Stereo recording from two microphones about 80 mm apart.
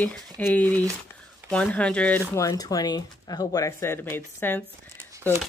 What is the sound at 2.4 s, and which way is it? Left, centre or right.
Speech, left.